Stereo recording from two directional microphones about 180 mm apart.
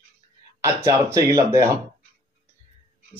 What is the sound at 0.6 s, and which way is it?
Speech, 15° right (ahead or behind).